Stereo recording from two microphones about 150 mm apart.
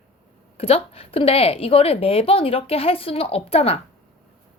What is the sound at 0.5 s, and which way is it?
A woman's voice, 40° left (ahead or behind).